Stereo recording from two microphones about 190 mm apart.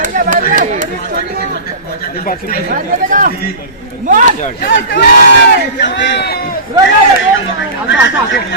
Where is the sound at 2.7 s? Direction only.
45° right (ahead or behind).